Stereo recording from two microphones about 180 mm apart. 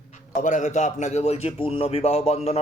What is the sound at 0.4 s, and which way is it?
Speech, 40° left (ahead or behind).